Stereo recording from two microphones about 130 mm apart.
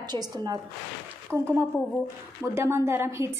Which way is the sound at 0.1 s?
30° right (ahead or behind).